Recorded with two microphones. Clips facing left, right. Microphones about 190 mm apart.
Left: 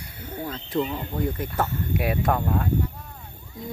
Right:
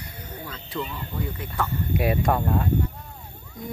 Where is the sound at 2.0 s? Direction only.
Centre (ahead or behind).